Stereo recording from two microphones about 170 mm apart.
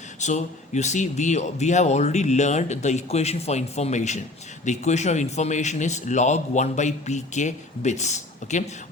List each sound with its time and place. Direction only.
0.2 s speech: 45° left (ahead or behind)